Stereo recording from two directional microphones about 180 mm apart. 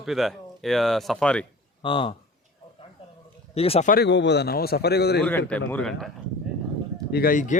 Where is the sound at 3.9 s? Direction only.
70° left (ahead or behind).